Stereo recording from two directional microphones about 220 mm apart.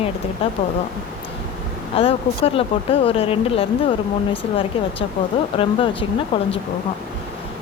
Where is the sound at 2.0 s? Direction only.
25° left (ahead or behind).